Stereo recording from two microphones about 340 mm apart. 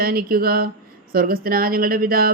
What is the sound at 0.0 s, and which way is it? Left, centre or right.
Speech, right.